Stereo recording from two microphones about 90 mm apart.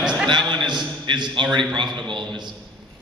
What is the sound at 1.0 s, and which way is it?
A man's voice, 60° right (ahead or behind).